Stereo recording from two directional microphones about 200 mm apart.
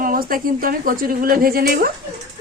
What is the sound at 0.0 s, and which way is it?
A woman's voice, 45° right (ahead or behind).